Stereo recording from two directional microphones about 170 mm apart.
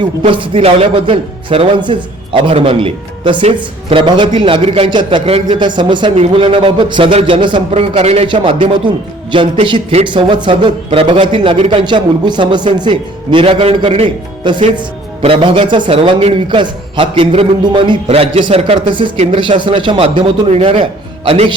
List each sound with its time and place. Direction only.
0.3 s a man's voice: 30° right (ahead or behind)